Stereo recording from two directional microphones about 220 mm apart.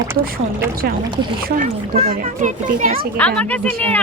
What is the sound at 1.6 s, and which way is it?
A child's voice, 30° right (ahead or behind).